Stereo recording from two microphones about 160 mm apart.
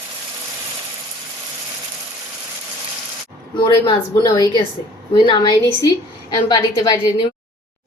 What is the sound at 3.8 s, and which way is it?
A woman's voice, 25° left (ahead or behind).